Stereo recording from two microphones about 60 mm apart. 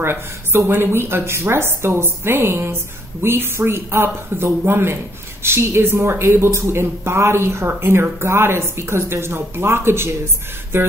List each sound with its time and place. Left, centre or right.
0.0 s a woman's voice: right